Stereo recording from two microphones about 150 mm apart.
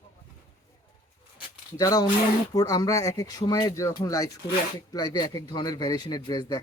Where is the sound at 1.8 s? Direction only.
25° left (ahead or behind).